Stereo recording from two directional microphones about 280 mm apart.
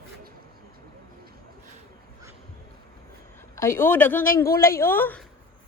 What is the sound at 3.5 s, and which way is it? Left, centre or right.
Speech, centre.